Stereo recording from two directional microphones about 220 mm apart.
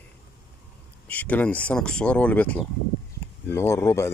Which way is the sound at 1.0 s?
5° left (ahead or behind).